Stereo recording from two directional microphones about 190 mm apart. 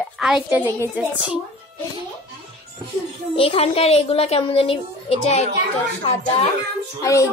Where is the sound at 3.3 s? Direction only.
30° left (ahead or behind).